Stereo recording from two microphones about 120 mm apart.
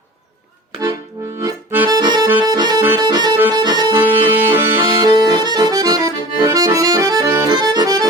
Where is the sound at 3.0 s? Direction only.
35° right (ahead or behind).